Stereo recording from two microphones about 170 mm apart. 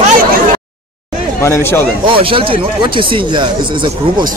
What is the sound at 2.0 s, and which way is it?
Speech, 30° right (ahead or behind).